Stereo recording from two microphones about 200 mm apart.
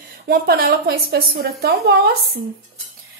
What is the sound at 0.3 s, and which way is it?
A woman's voice, 50° right (ahead or behind).